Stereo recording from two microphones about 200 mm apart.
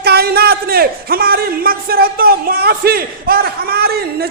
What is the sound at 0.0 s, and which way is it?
A man's voice, 50° right (ahead or behind).